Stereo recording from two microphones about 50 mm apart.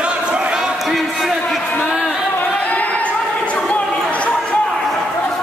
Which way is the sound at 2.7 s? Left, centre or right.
Left.